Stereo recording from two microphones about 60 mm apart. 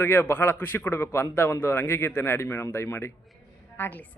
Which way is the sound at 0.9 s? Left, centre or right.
Left.